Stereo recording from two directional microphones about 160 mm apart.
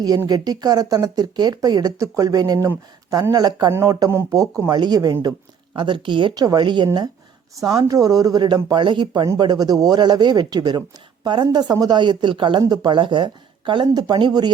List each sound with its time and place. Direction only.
0.0 s speech: 25° right (ahead or behind)